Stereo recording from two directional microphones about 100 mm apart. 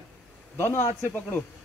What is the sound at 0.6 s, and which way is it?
Speech, 25° left (ahead or behind).